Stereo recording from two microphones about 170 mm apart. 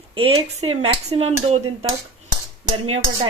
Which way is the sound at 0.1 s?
30° right (ahead or behind).